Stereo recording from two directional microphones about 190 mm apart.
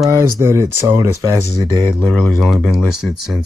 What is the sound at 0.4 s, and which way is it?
Speech, 15° right (ahead or behind).